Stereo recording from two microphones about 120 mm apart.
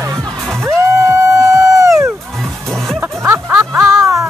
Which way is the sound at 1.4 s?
30° right (ahead or behind).